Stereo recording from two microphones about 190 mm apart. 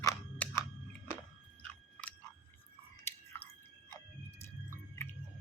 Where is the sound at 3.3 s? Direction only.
10° left (ahead or behind).